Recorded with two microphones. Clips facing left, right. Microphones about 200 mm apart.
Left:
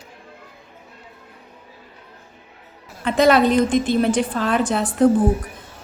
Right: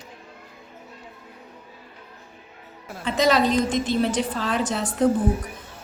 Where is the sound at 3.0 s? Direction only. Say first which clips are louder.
Left 5 dB; 55° left (ahead or behind).